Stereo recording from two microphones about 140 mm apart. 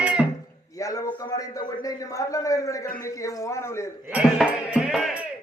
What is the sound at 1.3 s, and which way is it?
A man's voice, 25° left (ahead or behind).